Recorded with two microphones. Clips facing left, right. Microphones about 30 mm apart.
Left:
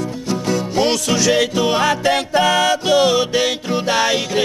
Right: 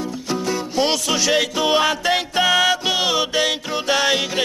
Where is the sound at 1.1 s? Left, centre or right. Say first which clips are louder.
Left 3 dB; centre.